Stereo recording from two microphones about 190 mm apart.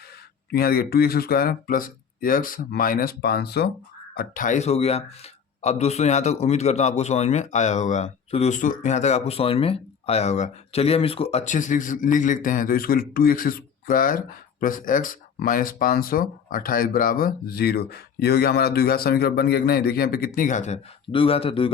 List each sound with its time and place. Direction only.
0.5 s speech: 50° left (ahead or behind)
21.1 s speech: 30° left (ahead or behind)